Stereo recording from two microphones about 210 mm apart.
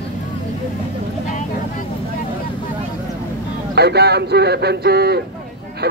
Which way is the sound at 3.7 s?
50° right (ahead or behind).